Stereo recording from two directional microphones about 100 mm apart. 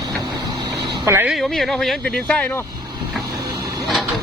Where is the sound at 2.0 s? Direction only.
15° left (ahead or behind).